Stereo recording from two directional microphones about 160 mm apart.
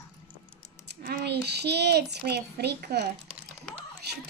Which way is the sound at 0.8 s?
80° right.